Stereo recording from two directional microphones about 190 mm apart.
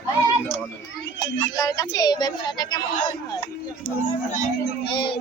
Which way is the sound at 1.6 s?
20° left (ahead or behind).